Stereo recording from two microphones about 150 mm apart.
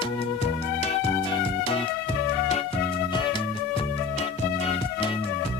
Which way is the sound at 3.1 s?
35° left (ahead or behind).